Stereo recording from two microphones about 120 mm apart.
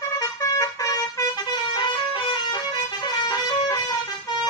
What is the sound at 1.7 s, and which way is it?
Vehicle horn, 40° left (ahead or behind).